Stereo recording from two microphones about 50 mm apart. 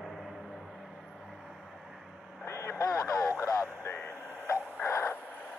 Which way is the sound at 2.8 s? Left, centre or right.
Left.